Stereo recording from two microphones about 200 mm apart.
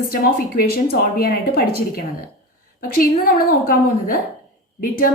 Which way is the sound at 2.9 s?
45° left (ahead or behind).